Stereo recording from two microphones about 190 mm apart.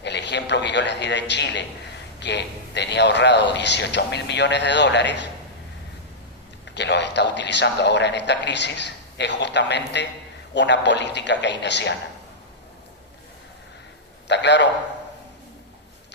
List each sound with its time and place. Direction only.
0.0 s a man's voice: 65° left (ahead or behind)
6.7 s a man's voice: 65° left (ahead or behind)
14.3 s a man's voice: 65° left (ahead or behind)